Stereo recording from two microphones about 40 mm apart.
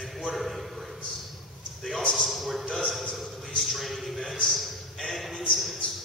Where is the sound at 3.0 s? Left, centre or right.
Centre.